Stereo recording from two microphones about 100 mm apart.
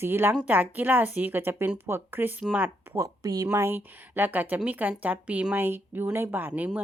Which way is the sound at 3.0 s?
35° right (ahead or behind).